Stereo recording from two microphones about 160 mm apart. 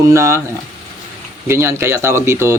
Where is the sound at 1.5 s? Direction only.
15° right (ahead or behind).